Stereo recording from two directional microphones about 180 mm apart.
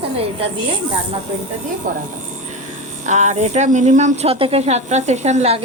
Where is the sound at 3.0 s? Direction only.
40° right (ahead or behind).